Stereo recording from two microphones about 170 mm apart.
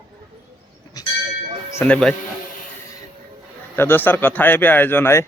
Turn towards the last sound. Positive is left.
turn(degrees=15)  # may be behind; listen again after turning